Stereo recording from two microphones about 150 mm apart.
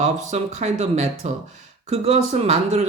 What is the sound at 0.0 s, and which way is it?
Speech, 50° right (ahead or behind).